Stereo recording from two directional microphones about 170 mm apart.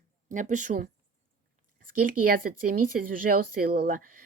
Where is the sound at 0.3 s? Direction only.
45° right (ahead or behind).